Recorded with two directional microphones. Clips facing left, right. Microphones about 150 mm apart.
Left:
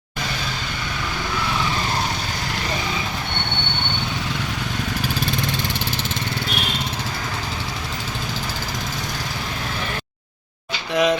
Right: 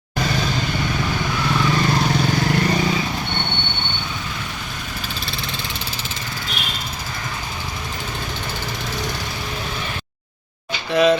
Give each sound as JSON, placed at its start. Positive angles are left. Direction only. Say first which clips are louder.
{"t": 11.0, "sound": "speech", "louder": "right 3 dB", "side_deg": 15}